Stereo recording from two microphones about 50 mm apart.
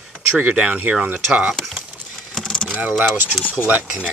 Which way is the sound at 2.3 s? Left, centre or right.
Centre.